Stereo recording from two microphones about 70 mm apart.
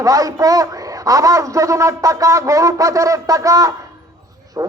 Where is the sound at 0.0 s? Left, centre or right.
Right.